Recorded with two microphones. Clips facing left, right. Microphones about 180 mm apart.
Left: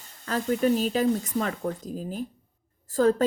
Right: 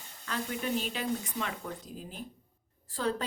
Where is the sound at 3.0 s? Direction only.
45° left (ahead or behind).